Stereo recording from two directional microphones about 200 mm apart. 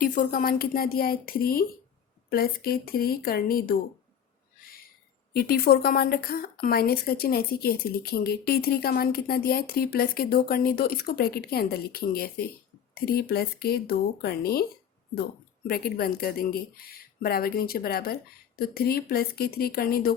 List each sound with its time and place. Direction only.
0.0 s speech: 45° left (ahead or behind)
5.3 s speech: 50° left (ahead or behind)